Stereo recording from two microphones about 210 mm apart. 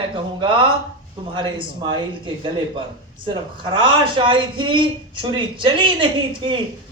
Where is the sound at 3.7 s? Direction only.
25° right (ahead or behind).